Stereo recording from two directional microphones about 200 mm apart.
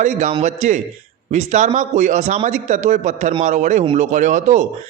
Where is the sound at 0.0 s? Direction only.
35° right (ahead or behind).